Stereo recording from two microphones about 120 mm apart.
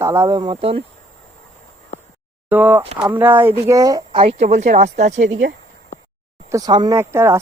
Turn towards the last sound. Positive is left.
turn(degrees=-20)  # may be behind; listen again after turning